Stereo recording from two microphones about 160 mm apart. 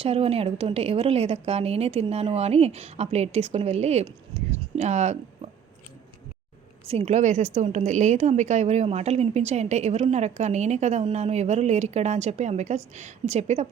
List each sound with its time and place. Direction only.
0.0 s a woman's voice: 40° right (ahead or behind)
4.4 s a sound: 45° right (ahead or behind)
6.8 s a woman's voice: 40° right (ahead or behind)